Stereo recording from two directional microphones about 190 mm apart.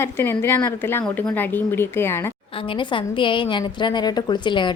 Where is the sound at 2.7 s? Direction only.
25° left (ahead or behind).